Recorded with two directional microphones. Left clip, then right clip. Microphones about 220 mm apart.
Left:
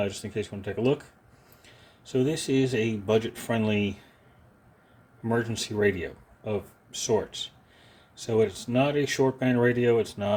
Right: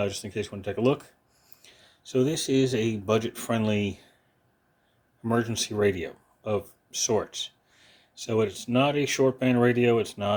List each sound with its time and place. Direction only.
0.0 s speech: 20° right (ahead or behind)
5.3 s speech: 20° right (ahead or behind)